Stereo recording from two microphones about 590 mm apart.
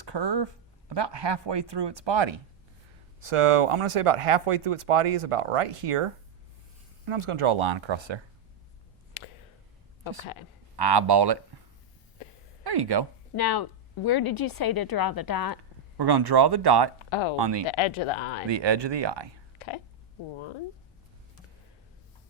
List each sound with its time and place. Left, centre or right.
0.0 s speech: right
3.2 s speech: right
9.2 s a sound: left
10.8 s speech: right
12.6 s speech: right
13.3 s speech: left
16.0 s speech: right
17.1 s speech: left
17.3 s speech: right
17.7 s speech: left
18.4 s speech: right